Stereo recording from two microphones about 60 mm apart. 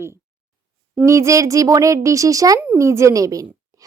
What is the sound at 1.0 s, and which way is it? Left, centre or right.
A woman's voice, right.